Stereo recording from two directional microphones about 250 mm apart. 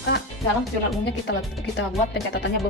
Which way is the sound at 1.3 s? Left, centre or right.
Left.